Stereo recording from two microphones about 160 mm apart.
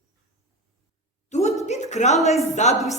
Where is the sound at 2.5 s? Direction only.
45° left (ahead or behind).